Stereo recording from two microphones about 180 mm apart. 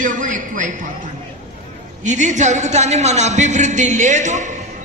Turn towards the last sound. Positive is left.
turn(degrees=-40)  # may be behind; listen again after turning